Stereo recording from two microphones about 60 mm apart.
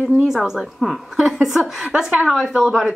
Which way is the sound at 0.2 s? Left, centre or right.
Centre.